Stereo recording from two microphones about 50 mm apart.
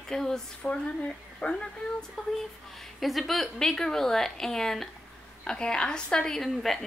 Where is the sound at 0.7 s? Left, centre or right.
Centre.